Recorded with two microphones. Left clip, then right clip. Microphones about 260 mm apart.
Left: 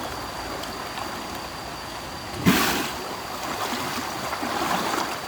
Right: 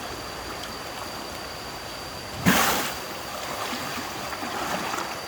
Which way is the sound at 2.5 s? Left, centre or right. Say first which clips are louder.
Even; centre.